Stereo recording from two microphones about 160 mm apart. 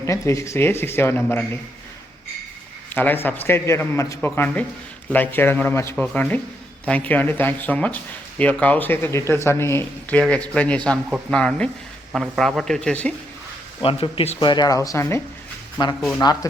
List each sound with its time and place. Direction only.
0.0 s speech: 15° left (ahead or behind)
2.9 s speech: 10° left (ahead or behind)
13.8 s speech: 35° left (ahead or behind)